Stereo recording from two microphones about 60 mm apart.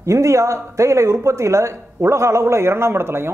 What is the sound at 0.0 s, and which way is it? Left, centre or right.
Speech, right.